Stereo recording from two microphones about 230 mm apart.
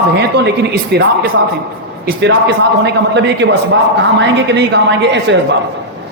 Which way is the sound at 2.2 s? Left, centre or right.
Right.